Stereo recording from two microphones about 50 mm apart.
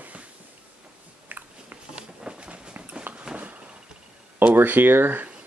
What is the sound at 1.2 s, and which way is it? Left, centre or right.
Biting, right.